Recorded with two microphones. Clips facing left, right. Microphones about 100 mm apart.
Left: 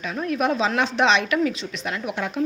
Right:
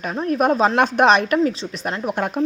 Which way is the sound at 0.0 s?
40° right (ahead or behind).